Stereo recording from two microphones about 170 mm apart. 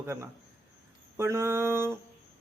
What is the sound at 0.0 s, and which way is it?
A man's voice, 15° right (ahead or behind).